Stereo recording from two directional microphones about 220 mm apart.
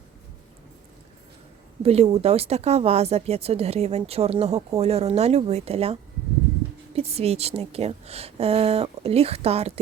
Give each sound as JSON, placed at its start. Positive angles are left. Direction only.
{"t": 1.8, "sound": "a woman's voice", "side_deg": -30}